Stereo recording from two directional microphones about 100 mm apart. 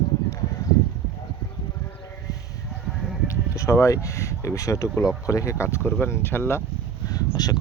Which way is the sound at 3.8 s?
30° left (ahead or behind).